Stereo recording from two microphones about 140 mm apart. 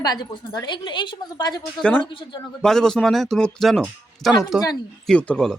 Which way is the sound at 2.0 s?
35° left (ahead or behind).